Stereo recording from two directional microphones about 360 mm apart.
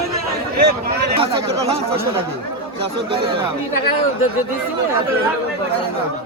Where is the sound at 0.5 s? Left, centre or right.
Right.